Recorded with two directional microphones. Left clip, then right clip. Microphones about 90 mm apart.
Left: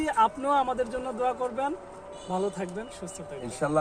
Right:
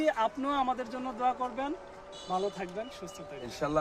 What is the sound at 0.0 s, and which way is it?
A man's voice, 45° right (ahead or behind).